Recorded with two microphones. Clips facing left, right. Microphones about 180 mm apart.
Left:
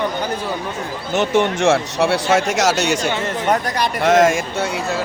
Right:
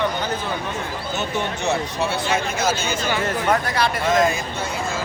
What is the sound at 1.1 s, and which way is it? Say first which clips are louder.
Speech: left 10 dB; 90° left.